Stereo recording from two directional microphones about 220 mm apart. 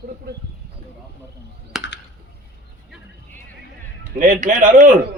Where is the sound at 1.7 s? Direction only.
Centre (ahead or behind).